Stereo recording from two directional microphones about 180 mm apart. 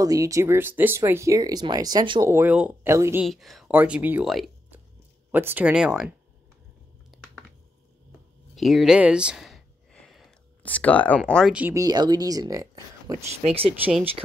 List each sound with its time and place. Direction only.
0.0 s speech: 20° right (ahead or behind)
3.3 s speech: centre (ahead or behind)
7.1 s a sound: centre (ahead or behind)
8.5 s a sound: centre (ahead or behind)
11.3 s speech: 5° right (ahead or behind)
11.8 s speech: 25° right (ahead or behind)
13.4 s speech: 35° right (ahead or behind)